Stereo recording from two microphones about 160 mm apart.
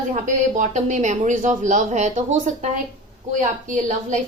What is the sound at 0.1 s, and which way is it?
A woman's voice, 50° right (ahead or behind).